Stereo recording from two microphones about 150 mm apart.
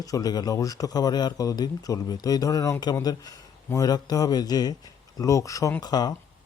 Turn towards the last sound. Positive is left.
turn(degrees=25)  # may be behind; listen again after turning